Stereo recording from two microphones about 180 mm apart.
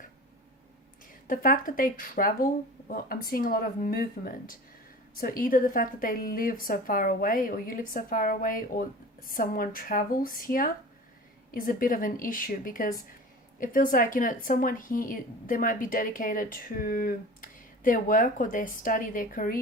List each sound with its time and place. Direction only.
1.3 s speech: 50° left (ahead or behind)